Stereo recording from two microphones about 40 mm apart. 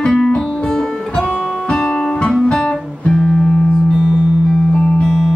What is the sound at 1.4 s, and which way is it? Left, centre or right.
Guitar, centre.